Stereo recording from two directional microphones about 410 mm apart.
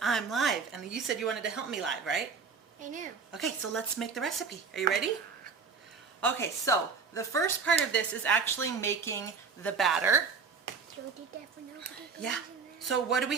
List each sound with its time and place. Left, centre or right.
0.0 s speech: centre
2.8 s a woman's voice: centre
3.3 s speech: centre
6.2 s a woman's voice: centre
12.8 s speech: centre